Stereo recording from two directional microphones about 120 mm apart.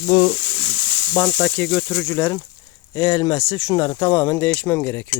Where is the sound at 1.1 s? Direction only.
25° left (ahead or behind).